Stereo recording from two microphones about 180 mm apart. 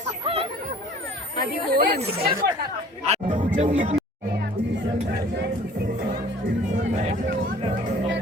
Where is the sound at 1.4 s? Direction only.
60° right (ahead or behind).